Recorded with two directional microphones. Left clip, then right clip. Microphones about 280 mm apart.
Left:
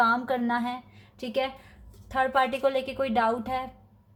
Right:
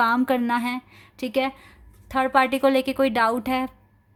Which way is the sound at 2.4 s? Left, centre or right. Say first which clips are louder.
Right 7 dB; right.